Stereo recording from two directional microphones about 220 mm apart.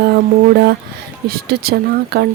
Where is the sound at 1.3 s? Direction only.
45° right (ahead or behind).